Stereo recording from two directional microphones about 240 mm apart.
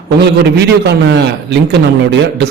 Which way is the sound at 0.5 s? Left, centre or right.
Right.